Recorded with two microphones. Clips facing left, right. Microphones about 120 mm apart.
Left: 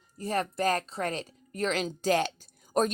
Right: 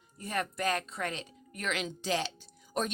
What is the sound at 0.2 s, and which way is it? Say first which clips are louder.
A woman's voice: left 5 dB; 30° left (ahead or behind).